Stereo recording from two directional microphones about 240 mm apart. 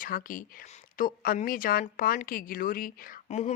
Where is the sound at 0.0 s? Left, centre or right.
Left.